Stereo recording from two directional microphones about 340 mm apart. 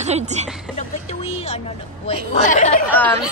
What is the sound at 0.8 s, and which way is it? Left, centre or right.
A woman's voice, centre.